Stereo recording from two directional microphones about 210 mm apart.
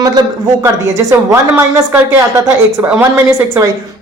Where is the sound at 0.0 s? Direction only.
20° right (ahead or behind).